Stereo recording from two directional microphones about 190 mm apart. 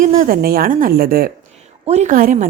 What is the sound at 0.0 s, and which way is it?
A woman's voice, 40° right (ahead or behind).